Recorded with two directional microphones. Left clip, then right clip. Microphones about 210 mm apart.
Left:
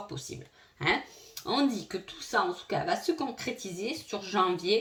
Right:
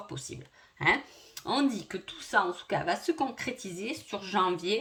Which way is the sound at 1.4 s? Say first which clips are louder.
Even; 35° right (ahead or behind).